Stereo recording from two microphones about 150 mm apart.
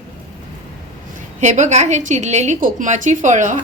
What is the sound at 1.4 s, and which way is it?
A woman's voice, 55° right (ahead or behind).